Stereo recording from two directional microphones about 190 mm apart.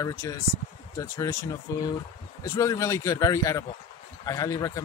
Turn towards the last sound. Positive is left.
turn(degrees=15)  # may be behind; listen again after turning